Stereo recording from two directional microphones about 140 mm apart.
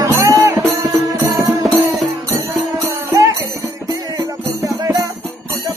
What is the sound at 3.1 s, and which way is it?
Music, 25° right (ahead or behind).